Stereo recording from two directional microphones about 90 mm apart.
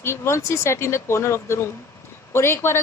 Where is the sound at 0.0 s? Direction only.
30° left (ahead or behind).